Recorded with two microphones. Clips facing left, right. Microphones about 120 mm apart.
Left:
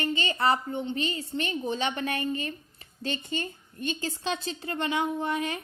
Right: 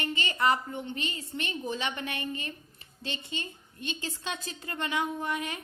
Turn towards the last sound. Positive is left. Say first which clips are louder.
# left 4 dB
turn(degrees=30)  # may be behind; listen again after turning